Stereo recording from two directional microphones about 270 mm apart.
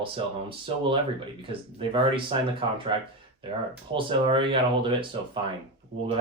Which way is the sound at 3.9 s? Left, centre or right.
Centre.